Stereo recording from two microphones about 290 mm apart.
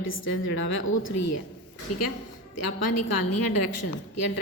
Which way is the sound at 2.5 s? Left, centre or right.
Left.